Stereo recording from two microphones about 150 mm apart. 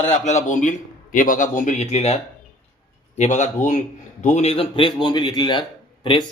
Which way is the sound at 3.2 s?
50° left (ahead or behind).